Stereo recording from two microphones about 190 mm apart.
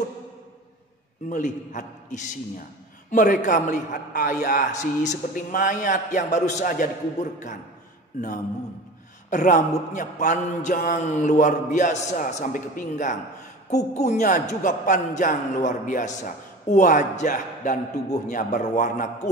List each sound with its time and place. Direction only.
1.3 s a man's voice: 40° left (ahead or behind)
9.3 s a man's voice: 45° left (ahead or behind)